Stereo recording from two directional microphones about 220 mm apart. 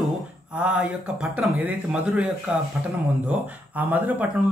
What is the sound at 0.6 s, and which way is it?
Speech, 5° right (ahead or behind).